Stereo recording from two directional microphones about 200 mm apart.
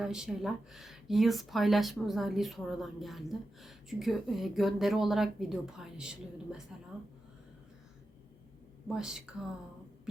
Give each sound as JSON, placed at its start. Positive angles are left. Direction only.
{"t": 0.0, "sound": "speech", "side_deg": -5}
{"t": 8.9, "sound": "speech", "side_deg": -5}